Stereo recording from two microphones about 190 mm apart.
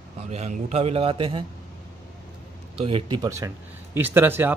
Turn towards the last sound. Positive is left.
turn(degrees=-10)  # may be behind; listen again after turning